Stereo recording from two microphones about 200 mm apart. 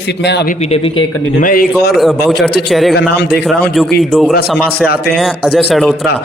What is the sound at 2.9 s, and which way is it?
Speech, 55° left (ahead or behind).